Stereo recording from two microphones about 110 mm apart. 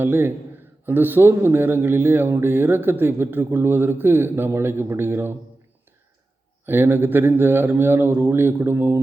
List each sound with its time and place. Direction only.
0.0 s a man's voice: 20° right (ahead or behind)
6.7 s a man's voice: 20° right (ahead or behind)